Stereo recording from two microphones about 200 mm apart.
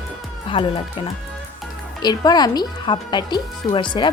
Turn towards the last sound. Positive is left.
turn(degrees=25)  # may be behind; listen again after turning